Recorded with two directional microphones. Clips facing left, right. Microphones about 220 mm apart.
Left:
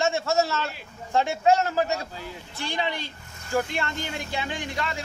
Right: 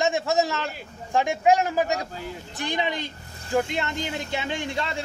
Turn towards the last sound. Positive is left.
turn(degrees=-25)  # may be behind; listen again after turning